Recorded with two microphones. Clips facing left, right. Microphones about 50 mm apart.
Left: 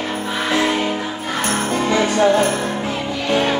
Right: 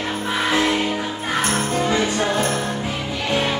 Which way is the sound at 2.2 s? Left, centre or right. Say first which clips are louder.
Left 6 dB; centre.